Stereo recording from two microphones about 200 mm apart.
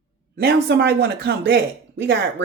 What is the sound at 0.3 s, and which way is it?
Speech, 50° right (ahead or behind).